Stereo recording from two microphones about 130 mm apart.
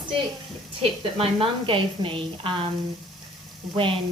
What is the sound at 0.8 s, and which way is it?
A woman's voice, 45° right (ahead or behind).